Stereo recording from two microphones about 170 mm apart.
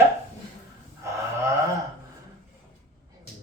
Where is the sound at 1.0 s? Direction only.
15° right (ahead or behind).